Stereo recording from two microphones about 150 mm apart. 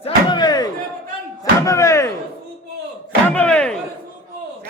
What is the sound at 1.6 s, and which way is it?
Music, 20° left (ahead or behind).